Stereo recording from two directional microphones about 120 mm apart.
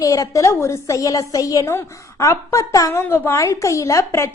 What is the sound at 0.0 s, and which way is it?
A child's voice, 30° left (ahead or behind).